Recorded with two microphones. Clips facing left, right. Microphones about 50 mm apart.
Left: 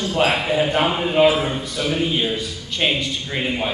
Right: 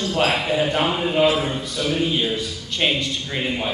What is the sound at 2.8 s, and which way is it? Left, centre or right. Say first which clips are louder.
Speech: left 1 dB; centre.